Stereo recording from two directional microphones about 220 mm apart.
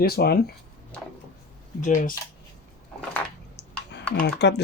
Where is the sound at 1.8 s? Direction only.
35° left (ahead or behind).